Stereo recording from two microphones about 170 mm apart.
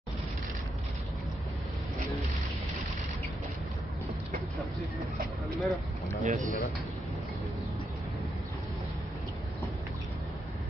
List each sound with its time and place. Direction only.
5.6 s speech: centre (ahead or behind)
6.2 s speech: 40° right (ahead or behind)